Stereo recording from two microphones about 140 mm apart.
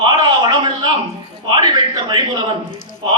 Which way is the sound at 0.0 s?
30° right (ahead or behind).